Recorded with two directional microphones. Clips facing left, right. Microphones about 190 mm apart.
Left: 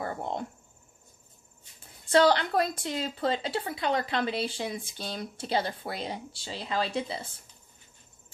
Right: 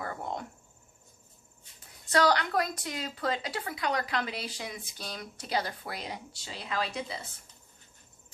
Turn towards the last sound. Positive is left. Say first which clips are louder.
# left 4 dB
turn(degrees=30)  # may be behind; listen again after turning